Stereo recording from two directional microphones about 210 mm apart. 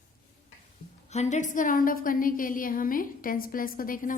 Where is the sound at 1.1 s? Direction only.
35° left (ahead or behind).